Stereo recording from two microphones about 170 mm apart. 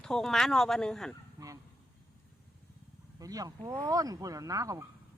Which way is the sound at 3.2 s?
20° right (ahead or behind).